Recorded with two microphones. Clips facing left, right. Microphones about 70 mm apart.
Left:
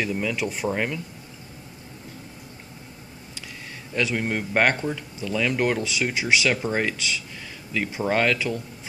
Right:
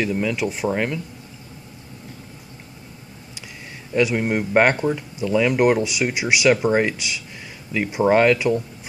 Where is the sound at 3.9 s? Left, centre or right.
Centre.